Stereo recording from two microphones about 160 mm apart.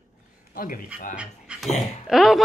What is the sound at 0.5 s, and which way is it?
Speech, 60° left (ahead or behind).